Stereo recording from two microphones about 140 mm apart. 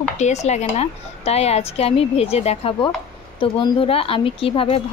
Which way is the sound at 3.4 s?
35° left (ahead or behind).